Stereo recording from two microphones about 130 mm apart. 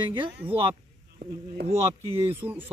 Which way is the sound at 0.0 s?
40° right (ahead or behind).